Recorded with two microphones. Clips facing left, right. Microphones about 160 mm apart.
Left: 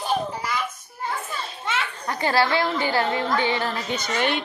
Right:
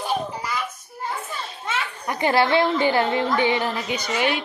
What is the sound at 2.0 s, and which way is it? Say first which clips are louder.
A woman's voice: right 2 dB; 20° right (ahead or behind).